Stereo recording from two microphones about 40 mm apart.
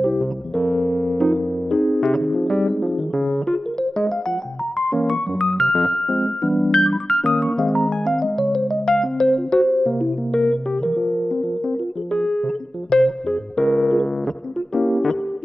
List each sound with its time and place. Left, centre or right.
0.0 s keyboard: centre
12.9 s music: centre